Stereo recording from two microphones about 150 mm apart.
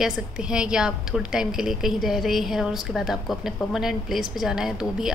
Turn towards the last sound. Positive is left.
turn(degrees=-5)  # may be behind; listen again after turning